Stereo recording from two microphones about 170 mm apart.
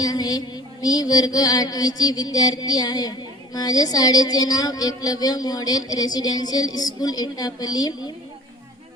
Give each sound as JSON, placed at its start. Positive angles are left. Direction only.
{"t": 0.0, "sound": "music", "side_deg": 25}